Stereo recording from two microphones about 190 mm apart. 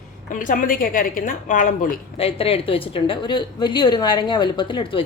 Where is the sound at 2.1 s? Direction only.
30° left (ahead or behind).